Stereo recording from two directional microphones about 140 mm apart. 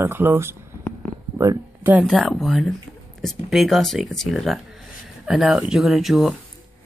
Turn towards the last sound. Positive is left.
turn(degrees=0)  # may be behind; listen again after turning